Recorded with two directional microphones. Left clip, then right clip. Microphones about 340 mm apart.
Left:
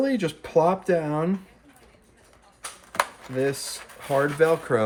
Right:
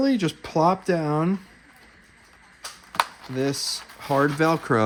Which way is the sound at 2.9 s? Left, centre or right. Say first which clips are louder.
Right 1 dB; centre.